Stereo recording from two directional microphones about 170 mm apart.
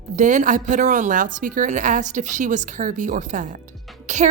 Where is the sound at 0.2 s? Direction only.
45° right (ahead or behind).